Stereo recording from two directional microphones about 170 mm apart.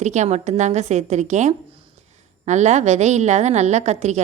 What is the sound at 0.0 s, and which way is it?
A woman's voice, 45° right (ahead or behind).